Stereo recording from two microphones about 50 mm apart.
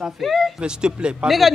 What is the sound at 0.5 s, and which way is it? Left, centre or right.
Speech, centre.